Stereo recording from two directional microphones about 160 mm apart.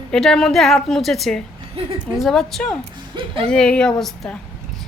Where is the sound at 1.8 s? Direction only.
35° right (ahead or behind).